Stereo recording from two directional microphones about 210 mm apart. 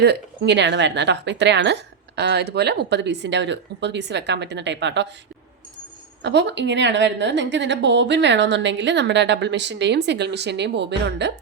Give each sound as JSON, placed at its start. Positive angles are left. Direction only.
{"t": 0.0, "sound": "a woman's voice", "side_deg": -55}
{"t": 6.2, "sound": "a woman's voice", "side_deg": -55}